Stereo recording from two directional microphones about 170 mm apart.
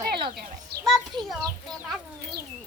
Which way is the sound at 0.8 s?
Centre (ahead or behind).